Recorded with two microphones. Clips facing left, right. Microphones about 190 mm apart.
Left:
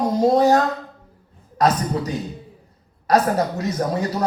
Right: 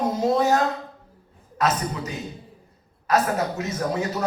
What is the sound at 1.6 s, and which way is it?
Speech, 40° left (ahead or behind).